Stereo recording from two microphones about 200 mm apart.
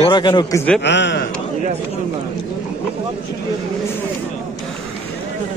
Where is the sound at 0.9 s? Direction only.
60° left (ahead or behind).